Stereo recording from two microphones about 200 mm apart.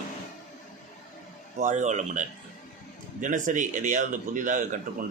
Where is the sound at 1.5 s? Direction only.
40° right (ahead or behind).